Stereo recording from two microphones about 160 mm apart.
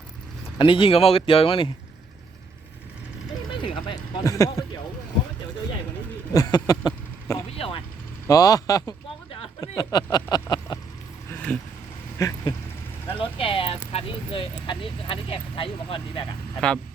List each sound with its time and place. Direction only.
0.6 s speech: 35° left (ahead or behind)
3.6 s a sound: 30° left (ahead or behind)
4.3 s speech: 20° left (ahead or behind)
6.3 s speech: 25° left (ahead or behind)
7.5 s vehicle: 35° left (ahead or behind)
8.3 s speech: 25° left (ahead or behind)
10.7 s vehicle: 30° left (ahead or behind)
11.3 s vehicle: 10° left (ahead or behind)
12.2 s speech: 20° left (ahead or behind)
13.1 s speech: 35° left (ahead or behind)
16.6 s speech: 5° left (ahead or behind)